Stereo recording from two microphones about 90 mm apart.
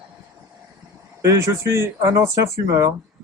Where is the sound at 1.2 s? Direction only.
35° right (ahead or behind).